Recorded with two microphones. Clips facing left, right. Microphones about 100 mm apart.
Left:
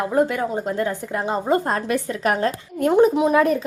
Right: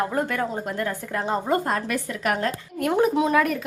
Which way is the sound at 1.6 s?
30° left (ahead or behind).